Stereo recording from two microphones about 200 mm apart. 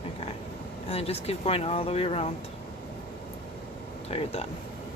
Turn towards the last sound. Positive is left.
turn(degrees=30)  # may be behind; listen again after turning